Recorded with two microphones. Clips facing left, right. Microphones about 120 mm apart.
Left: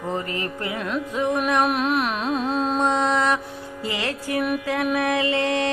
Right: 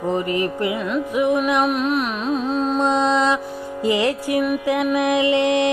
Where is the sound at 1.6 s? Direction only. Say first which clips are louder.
Right 2 dB; centre (ahead or behind).